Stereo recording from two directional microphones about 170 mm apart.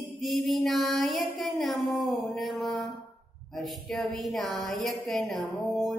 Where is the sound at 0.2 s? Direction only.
Centre (ahead or behind).